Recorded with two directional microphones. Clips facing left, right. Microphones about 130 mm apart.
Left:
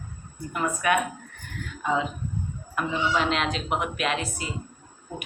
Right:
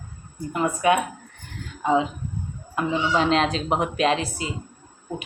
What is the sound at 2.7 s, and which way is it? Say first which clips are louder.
Speech: right 3 dB; 30° right (ahead or behind).